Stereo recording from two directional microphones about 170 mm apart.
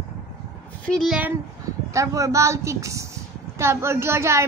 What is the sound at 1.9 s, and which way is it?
Speech, 20° right (ahead or behind).